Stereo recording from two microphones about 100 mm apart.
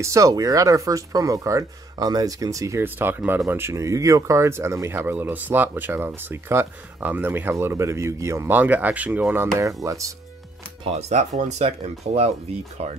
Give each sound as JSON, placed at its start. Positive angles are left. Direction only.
{"t": 0.0, "sound": "speech", "side_deg": -30}
{"t": 9.8, "sound": "speech", "side_deg": -30}
{"t": 10.8, "sound": "speech", "side_deg": -85}